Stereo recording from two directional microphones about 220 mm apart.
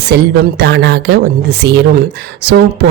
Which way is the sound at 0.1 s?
50° right (ahead or behind).